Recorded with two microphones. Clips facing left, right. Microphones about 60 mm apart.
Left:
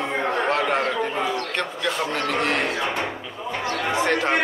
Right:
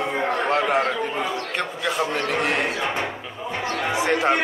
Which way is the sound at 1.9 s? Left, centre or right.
Centre.